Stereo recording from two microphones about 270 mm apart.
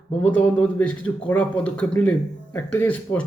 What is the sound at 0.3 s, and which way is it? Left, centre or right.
A man's voice, centre.